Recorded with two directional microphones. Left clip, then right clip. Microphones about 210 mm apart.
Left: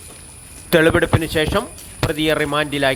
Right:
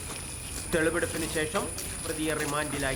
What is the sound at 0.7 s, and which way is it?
Speech, 35° left (ahead or behind).